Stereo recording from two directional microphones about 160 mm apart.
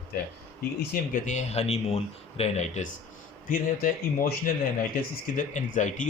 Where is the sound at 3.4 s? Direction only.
60° left (ahead or behind).